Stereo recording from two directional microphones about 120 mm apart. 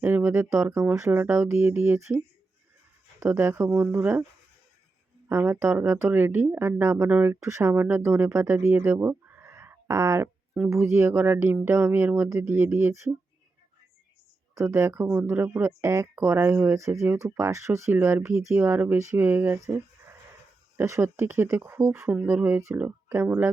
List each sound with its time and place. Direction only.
0.0 s speech: 15° right (ahead or behind)
5.3 s speech: 20° right (ahead or behind)
14.5 s speech: 25° right (ahead or behind)